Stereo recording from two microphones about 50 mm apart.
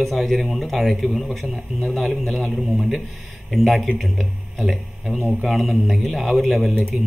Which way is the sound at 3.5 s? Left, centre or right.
Centre.